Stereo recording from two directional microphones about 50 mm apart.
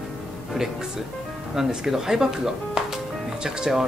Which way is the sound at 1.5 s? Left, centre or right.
Centre.